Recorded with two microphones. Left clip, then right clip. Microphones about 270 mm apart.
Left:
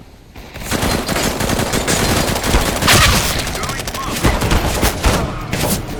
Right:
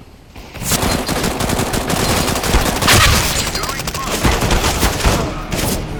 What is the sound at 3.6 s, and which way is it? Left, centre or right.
Fusillade, centre.